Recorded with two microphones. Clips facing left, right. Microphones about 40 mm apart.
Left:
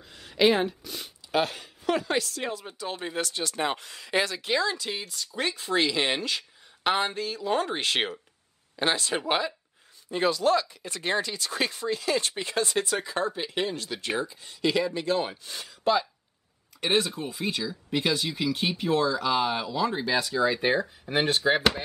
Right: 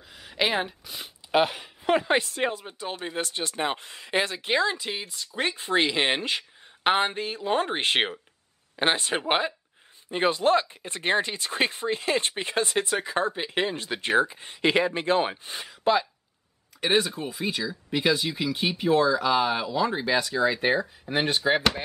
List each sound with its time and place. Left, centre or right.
0.1 s speech: centre
16.8 s speech: centre